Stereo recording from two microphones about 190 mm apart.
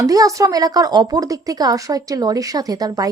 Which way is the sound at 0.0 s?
20° right (ahead or behind).